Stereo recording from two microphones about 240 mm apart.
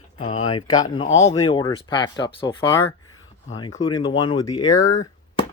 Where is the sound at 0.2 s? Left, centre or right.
Left.